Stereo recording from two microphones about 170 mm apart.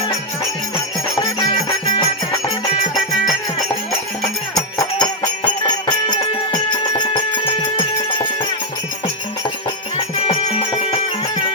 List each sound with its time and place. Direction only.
1.2 s music: 25° left (ahead or behind)
4.8 s music: 20° left (ahead or behind)
10.2 s music: 35° left (ahead or behind)